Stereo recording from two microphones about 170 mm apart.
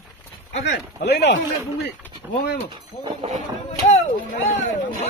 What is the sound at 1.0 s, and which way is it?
Speech, 85° left.